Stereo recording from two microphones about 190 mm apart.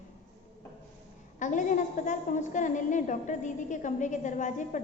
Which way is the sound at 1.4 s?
40° left (ahead or behind).